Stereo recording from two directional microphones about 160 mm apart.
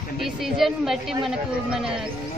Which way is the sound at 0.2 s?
Centre (ahead or behind).